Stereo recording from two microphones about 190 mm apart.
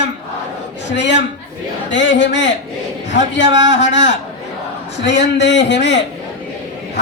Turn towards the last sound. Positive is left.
turn(degrees=65)  # may be behind; listen again after turning